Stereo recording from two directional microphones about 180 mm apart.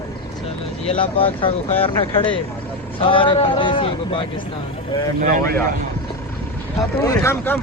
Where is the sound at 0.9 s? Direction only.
30° left (ahead or behind).